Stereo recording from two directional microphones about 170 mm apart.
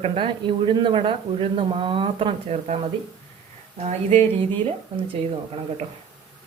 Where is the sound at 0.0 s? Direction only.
35° right (ahead or behind).